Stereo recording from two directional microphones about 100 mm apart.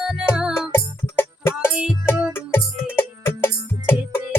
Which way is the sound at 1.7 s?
10° right (ahead or behind).